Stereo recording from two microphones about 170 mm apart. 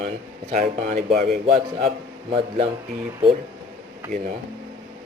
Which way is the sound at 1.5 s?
35° right (ahead or behind).